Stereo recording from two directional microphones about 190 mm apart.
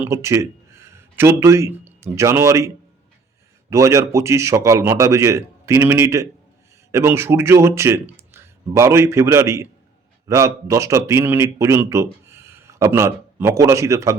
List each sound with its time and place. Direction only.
0.0 s speech: 15° right (ahead or behind)